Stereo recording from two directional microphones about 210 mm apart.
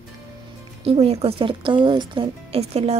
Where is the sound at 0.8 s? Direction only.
30° right (ahead or behind).